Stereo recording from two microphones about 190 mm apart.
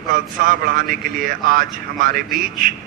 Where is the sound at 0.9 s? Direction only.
50° right (ahead or behind).